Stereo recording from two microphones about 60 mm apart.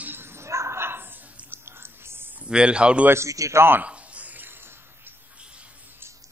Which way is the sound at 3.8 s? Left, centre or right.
Right.